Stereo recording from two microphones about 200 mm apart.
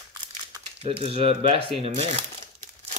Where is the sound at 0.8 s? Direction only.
30° right (ahead or behind).